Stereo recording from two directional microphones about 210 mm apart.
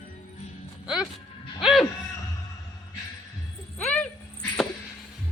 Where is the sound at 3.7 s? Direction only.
5° left (ahead or behind).